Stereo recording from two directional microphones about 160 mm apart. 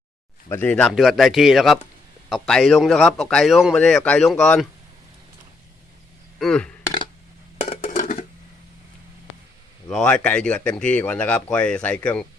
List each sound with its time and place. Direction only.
0.4 s a man's voice: 15° left (ahead or behind)
6.4 s a man's voice: 5° left (ahead or behind)
7.6 s dishes: 45° left (ahead or behind)
9.9 s speech: 5° left (ahead or behind)